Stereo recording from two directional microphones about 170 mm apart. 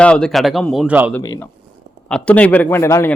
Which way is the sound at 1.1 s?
15° left (ahead or behind).